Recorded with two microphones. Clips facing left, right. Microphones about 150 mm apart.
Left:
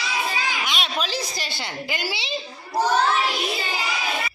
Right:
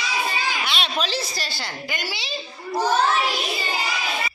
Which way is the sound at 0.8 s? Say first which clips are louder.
Right 1 dB; 10° left (ahead or behind).